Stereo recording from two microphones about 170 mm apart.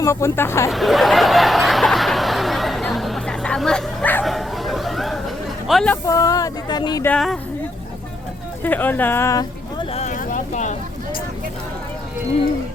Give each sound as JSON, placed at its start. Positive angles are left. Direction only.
{"t": 0.0, "sound": "speech", "side_deg": 15}
{"t": 0.7, "sound": "a sound", "side_deg": 0}
{"t": 5.6, "sound": "speech", "side_deg": 5}
{"t": 6.1, "sound": "speech", "side_deg": 20}
{"t": 7.0, "sound": "speech", "side_deg": 5}
{"t": 8.6, "sound": "speech", "side_deg": 10}
{"t": 9.9, "sound": "a sound", "side_deg": 45}